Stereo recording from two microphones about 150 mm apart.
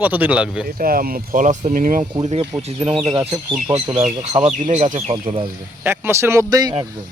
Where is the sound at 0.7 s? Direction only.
75° right (ahead or behind).